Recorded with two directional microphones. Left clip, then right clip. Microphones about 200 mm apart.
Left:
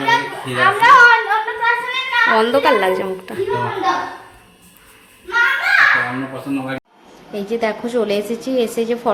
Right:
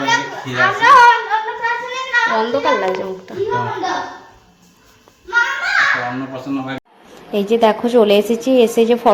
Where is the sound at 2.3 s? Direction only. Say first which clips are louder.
Left 2 dB; centre (ahead or behind).